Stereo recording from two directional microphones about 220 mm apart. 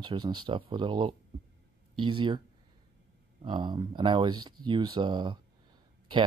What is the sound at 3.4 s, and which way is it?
Speech, 20° right (ahead or behind).